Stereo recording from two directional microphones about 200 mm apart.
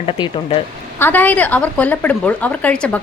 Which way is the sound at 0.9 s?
10° left (ahead or behind).